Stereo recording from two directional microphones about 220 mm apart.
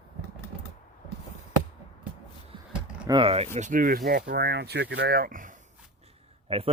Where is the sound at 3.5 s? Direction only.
35° right (ahead or behind).